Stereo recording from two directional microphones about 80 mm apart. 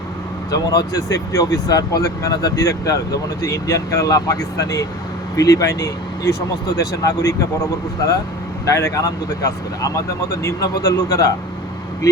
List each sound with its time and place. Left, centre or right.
0.5 s speech: left
8.6 s speech: left